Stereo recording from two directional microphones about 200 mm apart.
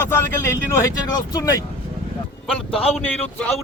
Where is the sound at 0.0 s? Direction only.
10° left (ahead or behind).